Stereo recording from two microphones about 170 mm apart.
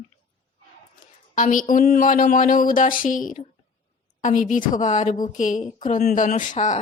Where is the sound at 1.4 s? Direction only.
50° left (ahead or behind).